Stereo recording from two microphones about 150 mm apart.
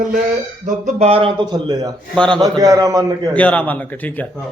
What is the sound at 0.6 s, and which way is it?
Speech, 55° right (ahead or behind).